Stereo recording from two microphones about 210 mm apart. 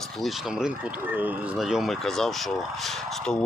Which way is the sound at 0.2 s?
Centre (ahead or behind).